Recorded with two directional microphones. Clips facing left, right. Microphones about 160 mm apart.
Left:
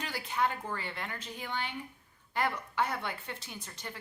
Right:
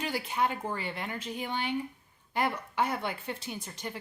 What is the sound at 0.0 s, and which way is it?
A woman's voice, 15° right (ahead or behind).